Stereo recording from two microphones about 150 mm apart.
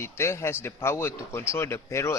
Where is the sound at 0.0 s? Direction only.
15° left (ahead or behind).